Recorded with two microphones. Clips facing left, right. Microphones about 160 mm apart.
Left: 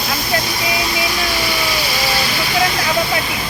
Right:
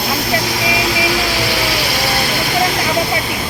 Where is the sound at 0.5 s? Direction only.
90° right.